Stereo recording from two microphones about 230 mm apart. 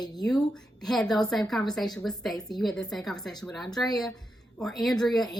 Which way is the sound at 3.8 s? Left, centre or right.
Centre.